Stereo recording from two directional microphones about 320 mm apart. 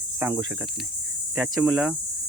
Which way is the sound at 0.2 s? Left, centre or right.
Centre.